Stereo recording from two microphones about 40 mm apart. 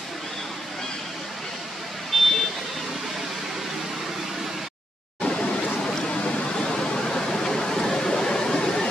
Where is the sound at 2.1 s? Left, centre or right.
Centre.